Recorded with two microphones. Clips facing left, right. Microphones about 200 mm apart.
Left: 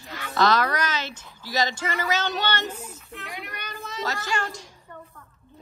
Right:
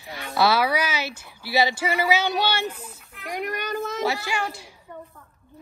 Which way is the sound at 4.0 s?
10° right (ahead or behind).